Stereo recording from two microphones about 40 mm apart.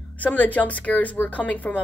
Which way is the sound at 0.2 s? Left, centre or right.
Left.